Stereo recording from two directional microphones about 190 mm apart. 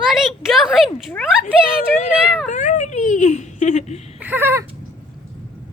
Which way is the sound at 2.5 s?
40° left (ahead or behind).